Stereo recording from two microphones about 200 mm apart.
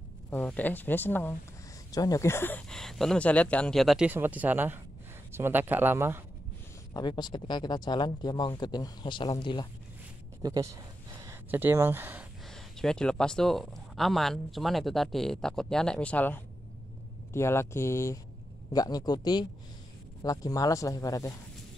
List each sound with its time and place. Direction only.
0.3 s speech: 10° left (ahead or behind); by 6.2 s 10° right (ahead or behind)
6.9 s speech: 20° left (ahead or behind)
10.4 s speech: 15° right (ahead or behind)
12.8 s speech: 5° left (ahead or behind)